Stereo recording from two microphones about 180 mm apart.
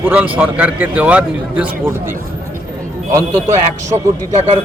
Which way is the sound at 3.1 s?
15° right (ahead or behind).